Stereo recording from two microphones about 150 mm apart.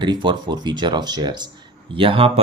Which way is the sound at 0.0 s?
30° right (ahead or behind).